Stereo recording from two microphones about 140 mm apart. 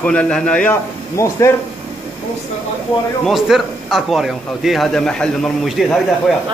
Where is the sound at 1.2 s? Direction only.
20° left (ahead or behind).